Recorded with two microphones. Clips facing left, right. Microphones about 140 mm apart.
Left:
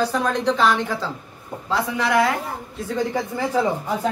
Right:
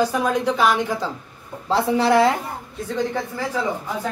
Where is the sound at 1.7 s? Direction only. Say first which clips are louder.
Right 4 dB; 30° right (ahead or behind).